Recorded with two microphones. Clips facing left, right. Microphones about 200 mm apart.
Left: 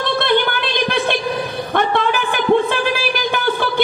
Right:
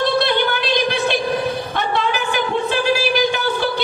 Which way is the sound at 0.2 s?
55° left (ahead or behind).